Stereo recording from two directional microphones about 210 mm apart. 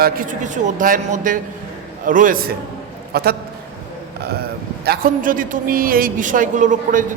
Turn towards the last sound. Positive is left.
turn(degrees=-40)  # may be behind; listen again after turning